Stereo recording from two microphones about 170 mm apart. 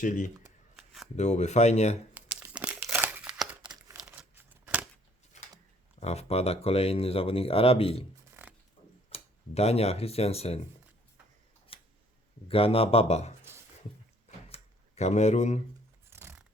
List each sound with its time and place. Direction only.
0.0 s speech: 50° left (ahead or behind)
2.4 s crumpling: 10° right (ahead or behind)
3.8 s crumpling: 20° right (ahead or behind)
4.2 s tearing: 10° right (ahead or behind)
5.3 s a sound: 45° left (ahead or behind)
6.0 s speech: 40° left (ahead or behind)
9.0 s speech: 35° left (ahead or behind)
11.7 s scissors: 35° left (ahead or behind)
12.5 s speech: 35° left (ahead or behind)
14.3 s drawer open or close: 40° left (ahead or behind)
16.0 s a sound: 15° right (ahead or behind)